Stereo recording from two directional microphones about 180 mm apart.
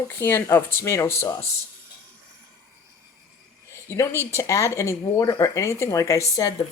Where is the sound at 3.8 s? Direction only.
15° left (ahead or behind).